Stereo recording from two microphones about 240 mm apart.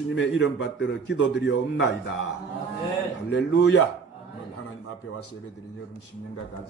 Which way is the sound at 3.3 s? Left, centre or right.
Left.